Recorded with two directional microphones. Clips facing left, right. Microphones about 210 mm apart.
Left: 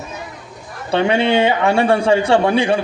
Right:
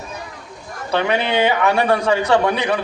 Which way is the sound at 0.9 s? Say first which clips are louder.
Left 4 dB; 30° left (ahead or behind).